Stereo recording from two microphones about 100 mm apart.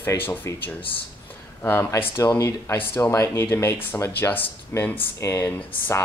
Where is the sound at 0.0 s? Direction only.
25° left (ahead or behind).